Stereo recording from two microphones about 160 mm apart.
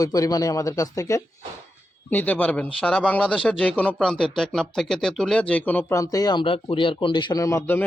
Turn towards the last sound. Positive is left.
turn(degrees=15)  # may be behind; listen again after turning